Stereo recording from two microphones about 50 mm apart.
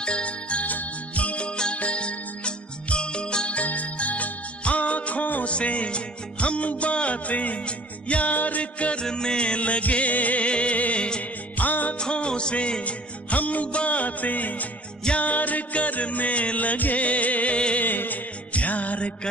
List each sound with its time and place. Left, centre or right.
0.0 s music: left
11.6 s music: left
12.0 s music: centre
17.8 s music: left